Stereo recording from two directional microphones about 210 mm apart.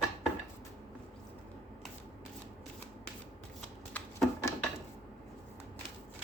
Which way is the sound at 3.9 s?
10° left (ahead or behind).